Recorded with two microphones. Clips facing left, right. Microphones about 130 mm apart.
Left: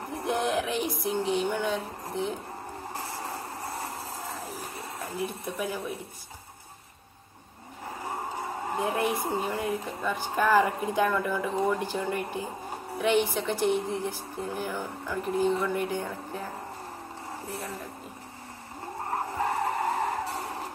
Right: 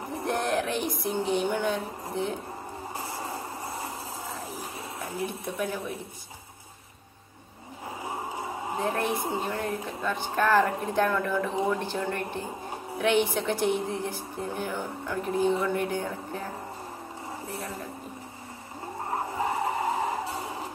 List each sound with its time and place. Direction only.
0.1 s a sound: centre (ahead or behind)
4.9 s speech: centre (ahead or behind)
8.0 s vehicle: 10° right (ahead or behind)
8.7 s speech: 5° left (ahead or behind)
17.5 s speech: centre (ahead or behind)
19.3 s vehicle: 10° right (ahead or behind)